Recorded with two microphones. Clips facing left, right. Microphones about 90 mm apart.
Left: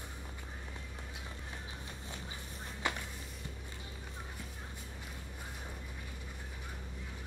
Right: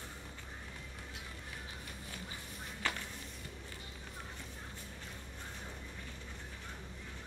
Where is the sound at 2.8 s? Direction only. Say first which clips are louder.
Left 2 dB; 15° left (ahead or behind).